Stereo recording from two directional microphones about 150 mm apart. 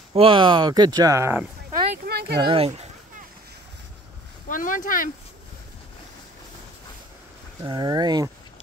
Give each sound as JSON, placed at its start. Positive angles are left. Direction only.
{"t": 0.1, "sound": "speech", "side_deg": -35}
{"t": 2.0, "sound": "a sound", "side_deg": -90}
{"t": 2.4, "sound": "speech", "side_deg": -40}
{"t": 4.5, "sound": "speech", "side_deg": 65}
{"t": 7.6, "sound": "speech", "side_deg": -30}